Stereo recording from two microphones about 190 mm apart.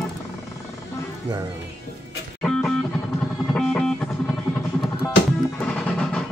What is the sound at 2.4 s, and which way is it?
Music, 5° left (ahead or behind).